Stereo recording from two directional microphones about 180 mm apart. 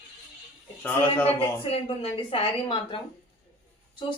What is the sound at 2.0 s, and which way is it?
A woman's voice, 30° left (ahead or behind).